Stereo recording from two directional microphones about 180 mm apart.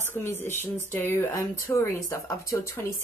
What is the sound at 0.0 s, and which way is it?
Speech, 10° left (ahead or behind).